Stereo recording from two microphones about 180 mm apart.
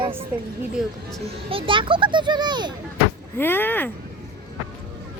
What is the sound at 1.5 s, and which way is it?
A child's voice, 30° right (ahead or behind).